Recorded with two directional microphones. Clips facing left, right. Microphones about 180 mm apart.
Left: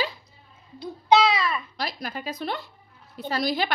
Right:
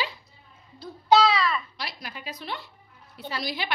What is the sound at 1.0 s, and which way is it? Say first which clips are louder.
Babbling: even; 20° left (ahead or behind).